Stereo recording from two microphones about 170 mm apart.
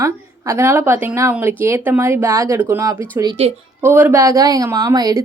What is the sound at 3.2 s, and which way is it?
Speech, 30° right (ahead or behind).